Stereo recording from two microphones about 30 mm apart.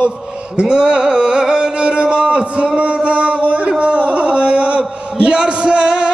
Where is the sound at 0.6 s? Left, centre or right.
Right.